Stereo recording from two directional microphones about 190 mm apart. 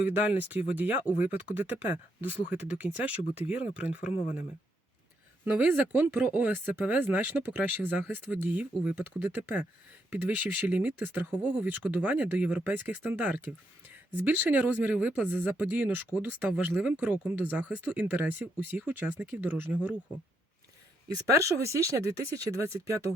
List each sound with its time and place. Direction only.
0.1 s speech: 10° right (ahead or behind)
4.0 s speech: 35° left (ahead or behind)
5.5 s speech: 10° right (ahead or behind)
21.2 s speech: 15° right (ahead or behind)